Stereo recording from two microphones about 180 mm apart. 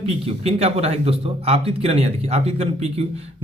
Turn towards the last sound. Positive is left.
turn(degrees=-35)  # may be behind; listen again after turning